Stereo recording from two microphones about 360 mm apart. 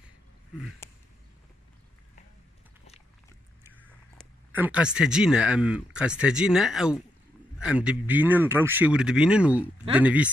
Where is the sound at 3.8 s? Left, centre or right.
Centre.